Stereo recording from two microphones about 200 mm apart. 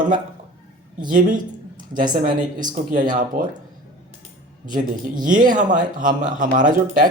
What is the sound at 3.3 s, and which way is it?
Speech, 40° right (ahead or behind).